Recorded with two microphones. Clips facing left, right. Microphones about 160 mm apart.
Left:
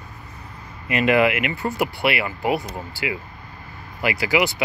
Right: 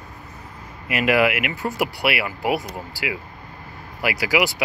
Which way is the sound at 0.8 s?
5° right (ahead or behind).